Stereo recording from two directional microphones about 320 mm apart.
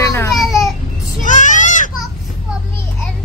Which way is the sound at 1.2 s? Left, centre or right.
Left.